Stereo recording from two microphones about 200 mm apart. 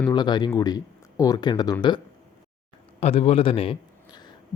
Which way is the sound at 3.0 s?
30° left (ahead or behind).